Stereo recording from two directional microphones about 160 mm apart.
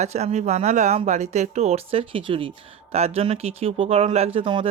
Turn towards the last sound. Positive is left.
turn(degrees=-35)  # may be behind; listen again after turning